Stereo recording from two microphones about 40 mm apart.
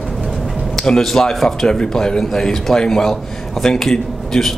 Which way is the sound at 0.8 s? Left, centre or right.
Centre.